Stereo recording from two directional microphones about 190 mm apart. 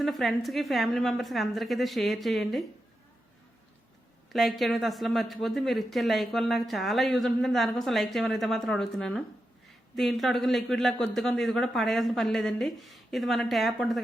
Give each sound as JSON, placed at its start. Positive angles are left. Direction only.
{"t": 0.0, "sound": "speech", "side_deg": 0}
{"t": 4.3, "sound": "speech", "side_deg": 0}